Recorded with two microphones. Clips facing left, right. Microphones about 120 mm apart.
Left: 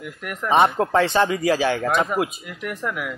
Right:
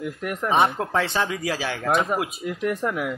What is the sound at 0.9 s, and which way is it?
Speech, 5° right (ahead or behind).